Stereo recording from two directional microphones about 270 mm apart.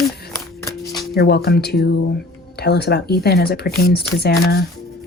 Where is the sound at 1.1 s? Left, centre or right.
Left.